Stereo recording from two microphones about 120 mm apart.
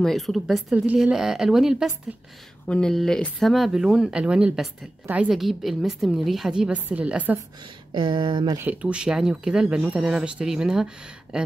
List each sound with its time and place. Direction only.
0.0 s a woman's voice: centre (ahead or behind)
7.9 s speech: 40° right (ahead or behind)
8.5 s speech: 10° right (ahead or behind)